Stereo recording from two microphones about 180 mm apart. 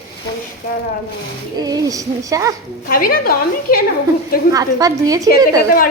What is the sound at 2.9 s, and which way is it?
Speech, 55° left (ahead or behind).